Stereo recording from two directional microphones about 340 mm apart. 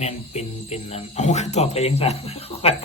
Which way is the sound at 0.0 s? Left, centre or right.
Centre.